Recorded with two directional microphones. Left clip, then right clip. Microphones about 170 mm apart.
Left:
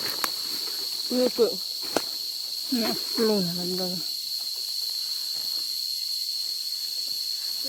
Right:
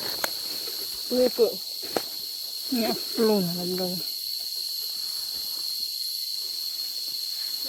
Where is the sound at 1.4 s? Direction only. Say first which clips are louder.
Left 1 dB; 75° left (ahead or behind).